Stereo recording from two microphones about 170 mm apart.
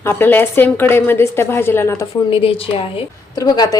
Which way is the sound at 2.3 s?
35° left (ahead or behind).